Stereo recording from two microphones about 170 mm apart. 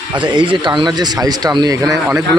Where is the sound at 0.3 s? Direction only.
25° right (ahead or behind).